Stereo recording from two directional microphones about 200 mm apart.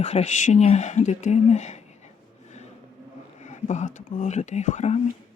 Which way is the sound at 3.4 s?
35° left (ahead or behind).